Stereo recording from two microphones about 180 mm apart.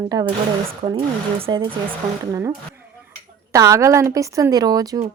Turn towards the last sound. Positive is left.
turn(degrees=-20)  # may be behind; listen again after turning